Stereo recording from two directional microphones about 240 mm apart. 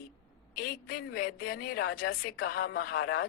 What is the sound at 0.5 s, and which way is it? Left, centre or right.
A woman's voice, left.